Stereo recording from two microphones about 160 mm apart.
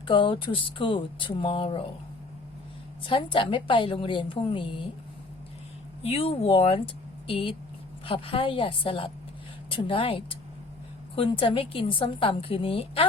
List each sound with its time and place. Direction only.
0.1 s a woman's voice: 30° left (ahead or behind)
3.0 s a woman's voice: 30° left (ahead or behind)
6.0 s a woman's voice: 35° left (ahead or behind)